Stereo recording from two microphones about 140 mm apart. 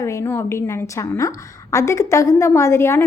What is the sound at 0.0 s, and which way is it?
A woman's voice, 20° left (ahead or behind).